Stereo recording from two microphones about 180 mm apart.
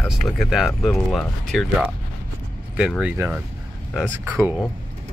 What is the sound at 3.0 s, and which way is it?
Speech, 10° right (ahead or behind).